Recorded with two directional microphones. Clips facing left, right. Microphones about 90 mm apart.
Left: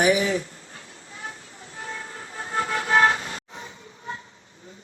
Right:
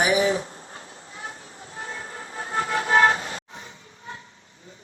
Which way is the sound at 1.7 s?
35° right (ahead or behind).